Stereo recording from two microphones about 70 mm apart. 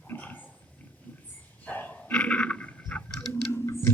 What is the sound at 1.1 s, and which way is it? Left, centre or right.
Dog, left.